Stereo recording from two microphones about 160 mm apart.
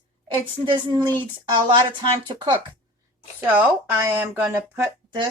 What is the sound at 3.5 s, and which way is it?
Speech, 10° right (ahead or behind).